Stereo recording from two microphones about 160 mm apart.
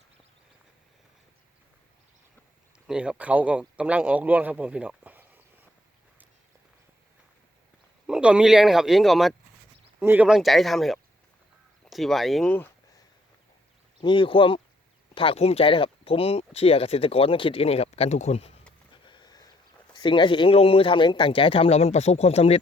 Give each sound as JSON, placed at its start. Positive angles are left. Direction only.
{"t": 2.8, "sound": "speech", "side_deg": -5}
{"t": 8.0, "sound": "speech", "side_deg": -5}
{"t": 14.0, "sound": "speech", "side_deg": 30}
{"t": 19.0, "sound": "a sound", "side_deg": 30}
{"t": 19.9, "sound": "speech", "side_deg": 30}